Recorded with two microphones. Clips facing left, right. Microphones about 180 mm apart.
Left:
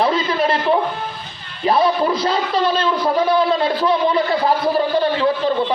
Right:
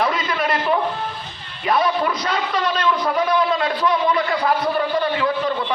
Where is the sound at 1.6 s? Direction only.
30° left (ahead or behind).